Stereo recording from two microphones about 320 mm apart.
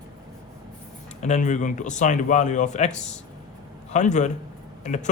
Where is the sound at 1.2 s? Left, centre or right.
Left.